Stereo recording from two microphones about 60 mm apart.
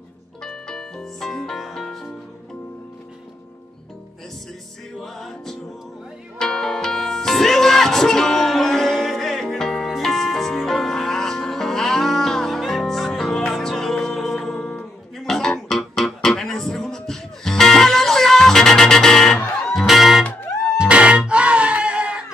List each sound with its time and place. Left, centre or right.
0.4 s music: centre
5.0 s music: centre
20.7 s music: centre